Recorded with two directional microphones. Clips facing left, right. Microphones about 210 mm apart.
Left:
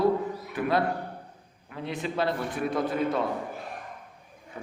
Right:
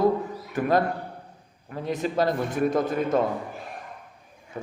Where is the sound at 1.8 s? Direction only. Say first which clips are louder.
Right 4 dB; 40° right (ahead or behind).